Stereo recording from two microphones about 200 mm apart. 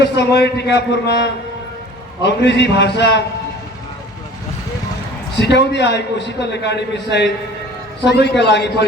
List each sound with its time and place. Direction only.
0.0 s a man's voice: 55° left (ahead or behind)
5.4 s a man's voice: 60° left (ahead or behind)